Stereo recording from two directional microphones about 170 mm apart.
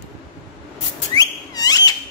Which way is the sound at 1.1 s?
20° left (ahead or behind).